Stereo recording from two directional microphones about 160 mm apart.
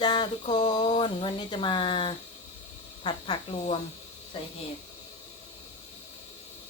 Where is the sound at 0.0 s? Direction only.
25° left (ahead or behind).